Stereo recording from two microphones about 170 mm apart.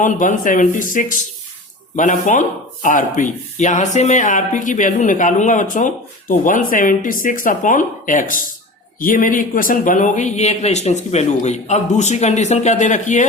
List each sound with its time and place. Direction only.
0.0 s speech: 50° left (ahead or behind)